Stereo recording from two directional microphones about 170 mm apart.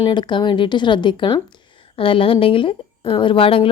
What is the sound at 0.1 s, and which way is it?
A woman's voice, 25° left (ahead or behind).